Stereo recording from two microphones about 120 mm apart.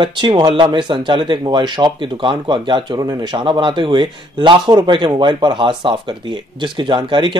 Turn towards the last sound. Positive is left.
turn(degrees=-40)  # may be behind; listen again after turning